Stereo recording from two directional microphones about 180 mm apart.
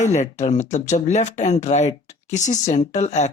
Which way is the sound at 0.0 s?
40° left (ahead or behind).